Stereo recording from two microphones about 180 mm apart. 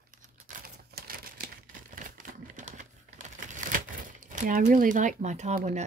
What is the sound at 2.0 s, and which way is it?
Typewriter, 45° right (ahead or behind).